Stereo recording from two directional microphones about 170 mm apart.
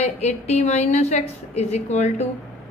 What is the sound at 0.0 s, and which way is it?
A woman's voice, 40° left (ahead or behind).